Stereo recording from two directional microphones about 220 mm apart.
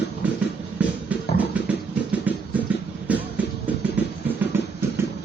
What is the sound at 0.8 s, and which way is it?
Music, 5° right (ahead or behind).